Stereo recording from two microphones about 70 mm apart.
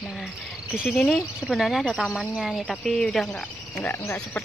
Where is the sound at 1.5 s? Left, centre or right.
Centre.